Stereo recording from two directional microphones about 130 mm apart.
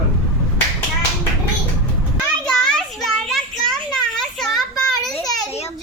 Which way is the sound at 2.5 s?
5° left (ahead or behind).